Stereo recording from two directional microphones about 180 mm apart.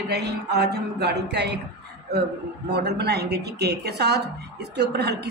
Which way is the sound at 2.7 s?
65° right (ahead or behind).